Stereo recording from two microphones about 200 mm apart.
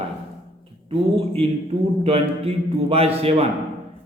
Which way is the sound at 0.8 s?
30° right (ahead or behind).